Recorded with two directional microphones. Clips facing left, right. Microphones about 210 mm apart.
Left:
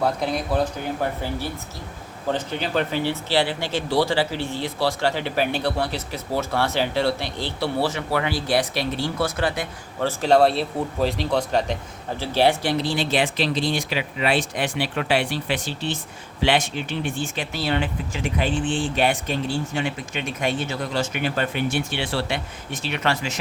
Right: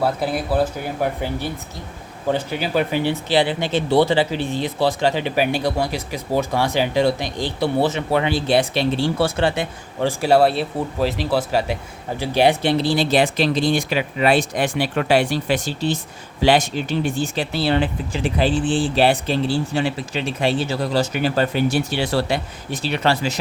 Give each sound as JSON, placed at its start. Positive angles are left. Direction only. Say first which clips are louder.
{"t": 0.0, "sound": "speech", "louder": "right 2 dB", "side_deg": -5}
{"t": 2.3, "sound": "speech", "louder": "right 3 dB", "side_deg": -10}
{"t": 10.0, "sound": "speech", "louder": "right 2 dB", "side_deg": -10}
{"t": 12.7, "sound": "speech", "louder": "right 5 dB", "side_deg": -35}